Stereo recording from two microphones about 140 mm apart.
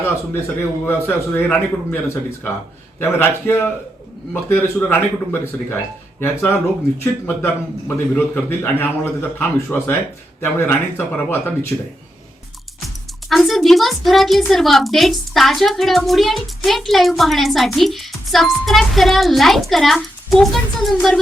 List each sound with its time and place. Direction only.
0.9 s a man's voice: 15° left (ahead or behind)
13.2 s a woman's voice: centre (ahead or behind)